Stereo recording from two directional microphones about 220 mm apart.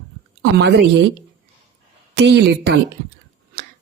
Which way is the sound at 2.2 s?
50° right (ahead or behind).